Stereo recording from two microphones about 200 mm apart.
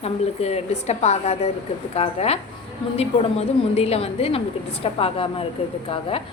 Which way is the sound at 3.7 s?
30° left (ahead or behind).